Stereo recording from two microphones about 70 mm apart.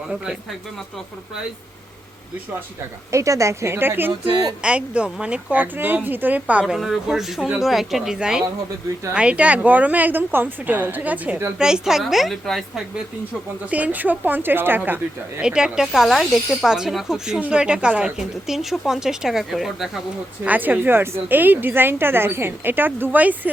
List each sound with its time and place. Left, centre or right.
3.1 s a woman's voice: right
4.6 s a woman's voice: centre
6.7 s a woman's voice: centre; by 11.3 s right
11.5 s speech: centre
13.7 s a woman's voice: centre
15.4 s a woman's voice: centre
16.0 s a woman's voice: centre
20.5 s a woman's voice: right